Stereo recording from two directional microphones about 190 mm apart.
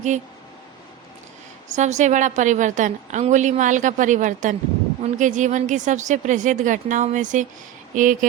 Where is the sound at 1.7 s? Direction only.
40° right (ahead or behind).